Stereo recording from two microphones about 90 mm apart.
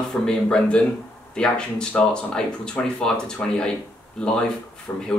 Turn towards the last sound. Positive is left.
turn(degrees=20)  # may be behind; listen again after turning